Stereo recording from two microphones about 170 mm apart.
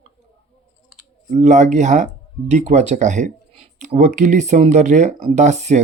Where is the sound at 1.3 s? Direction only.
45° right (ahead or behind).